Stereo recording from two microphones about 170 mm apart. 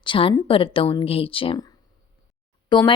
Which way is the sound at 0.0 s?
30° left (ahead or behind).